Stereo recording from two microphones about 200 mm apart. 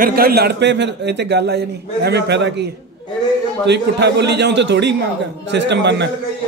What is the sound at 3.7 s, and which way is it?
A man's voice, 55° right (ahead or behind).